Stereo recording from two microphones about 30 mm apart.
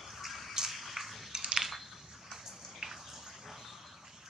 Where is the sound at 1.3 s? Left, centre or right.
Centre.